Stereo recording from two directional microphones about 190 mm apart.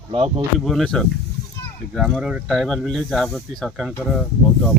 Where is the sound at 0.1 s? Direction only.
30° right (ahead or behind).